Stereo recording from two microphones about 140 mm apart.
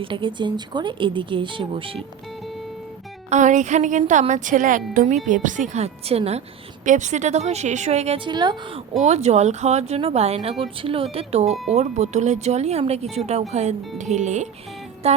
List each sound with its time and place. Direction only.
0.0 s speech: 35° right (ahead or behind)
3.2 s a woman's voice: 60° right (ahead or behind)
6.8 s speech: 65° right (ahead or behind); by 8.3 s 45° right (ahead or behind)
8.3 s speech: 30° right (ahead or behind)
9.0 s a woman's voice: 50° right (ahead or behind)